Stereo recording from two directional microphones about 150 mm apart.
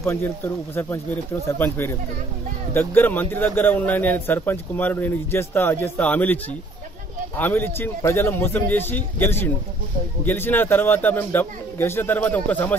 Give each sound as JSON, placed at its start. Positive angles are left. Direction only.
{"t": 0.0, "sound": "a man's voice", "side_deg": 15}